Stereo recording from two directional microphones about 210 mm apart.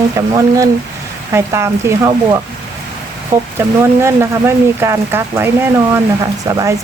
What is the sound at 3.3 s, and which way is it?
Speech, 15° right (ahead or behind).